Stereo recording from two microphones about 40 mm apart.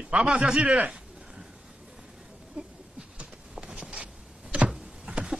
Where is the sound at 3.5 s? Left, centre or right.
Centre.